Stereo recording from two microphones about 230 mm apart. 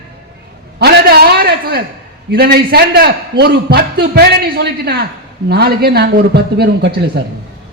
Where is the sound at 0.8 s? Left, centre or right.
Right.